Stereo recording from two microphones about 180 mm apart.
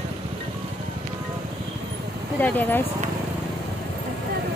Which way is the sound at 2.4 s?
10° left (ahead or behind).